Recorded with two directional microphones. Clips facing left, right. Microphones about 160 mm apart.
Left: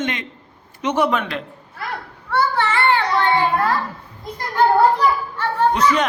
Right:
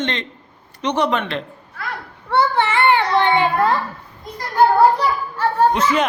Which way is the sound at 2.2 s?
25° right (ahead or behind).